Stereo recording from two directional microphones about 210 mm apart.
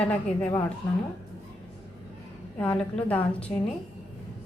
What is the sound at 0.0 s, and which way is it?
Speech, 5° left (ahead or behind).